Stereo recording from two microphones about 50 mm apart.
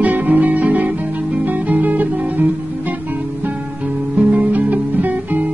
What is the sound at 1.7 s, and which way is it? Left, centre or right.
Music, right.